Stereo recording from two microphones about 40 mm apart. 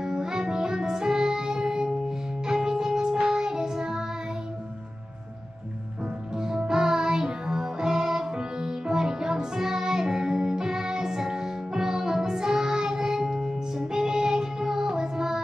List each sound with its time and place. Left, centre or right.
0.0 s music: centre
6.3 s music: centre